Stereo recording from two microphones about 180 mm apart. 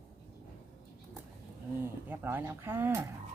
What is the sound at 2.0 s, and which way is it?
Speech, 10° right (ahead or behind).